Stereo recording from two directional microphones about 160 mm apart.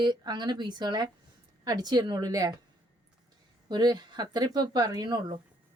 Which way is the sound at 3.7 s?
25° right (ahead or behind).